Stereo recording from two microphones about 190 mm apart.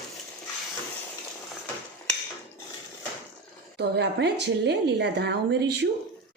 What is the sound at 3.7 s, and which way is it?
Speech, 60° right (ahead or behind).